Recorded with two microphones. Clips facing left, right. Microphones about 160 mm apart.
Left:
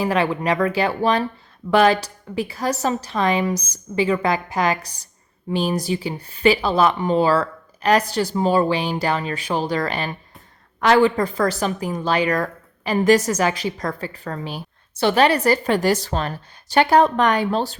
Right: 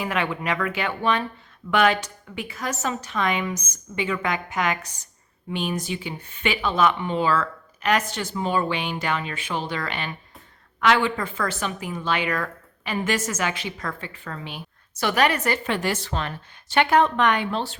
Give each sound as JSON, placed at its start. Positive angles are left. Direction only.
{"t": 0.0, "sound": "a woman's voice", "side_deg": 35}